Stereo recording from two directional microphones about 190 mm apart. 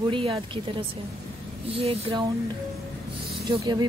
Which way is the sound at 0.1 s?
30° right (ahead or behind).